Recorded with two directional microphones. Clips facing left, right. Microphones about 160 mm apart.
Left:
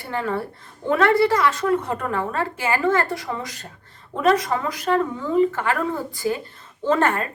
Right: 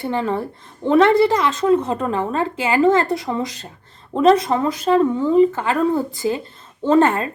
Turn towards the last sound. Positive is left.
turn(degrees=-25)  # may be behind; listen again after turning